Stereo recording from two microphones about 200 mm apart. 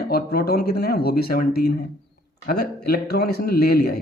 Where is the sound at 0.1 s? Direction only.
50° left (ahead or behind).